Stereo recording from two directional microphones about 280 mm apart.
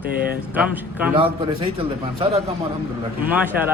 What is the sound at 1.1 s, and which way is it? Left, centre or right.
A man's voice, centre.